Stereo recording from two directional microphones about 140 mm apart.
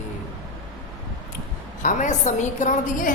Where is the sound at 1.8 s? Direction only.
60° left (ahead or behind).